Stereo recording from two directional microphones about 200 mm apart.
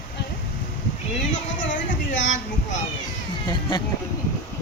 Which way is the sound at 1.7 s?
40° left (ahead or behind).